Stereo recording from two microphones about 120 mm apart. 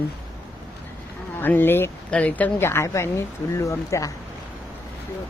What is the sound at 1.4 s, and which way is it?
Speech, 15° left (ahead or behind).